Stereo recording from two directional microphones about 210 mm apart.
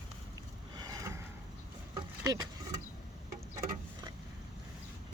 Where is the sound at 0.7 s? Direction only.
20° right (ahead or behind).